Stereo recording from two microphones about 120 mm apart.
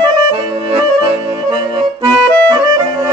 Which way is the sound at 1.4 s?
35° right (ahead or behind).